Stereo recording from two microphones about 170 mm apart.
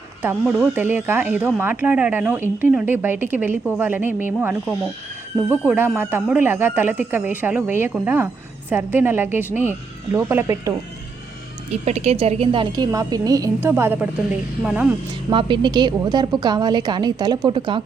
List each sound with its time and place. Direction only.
0.5 s speech: 10° right (ahead or behind)
11.9 s a woman's voice: 40° right (ahead or behind); by 14.9 s 5° right (ahead or behind)
15.3 s a woman's voice: 30° right (ahead or behind)